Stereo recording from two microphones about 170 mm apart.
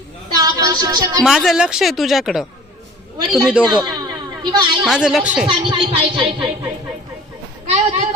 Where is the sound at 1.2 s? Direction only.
Centre (ahead or behind).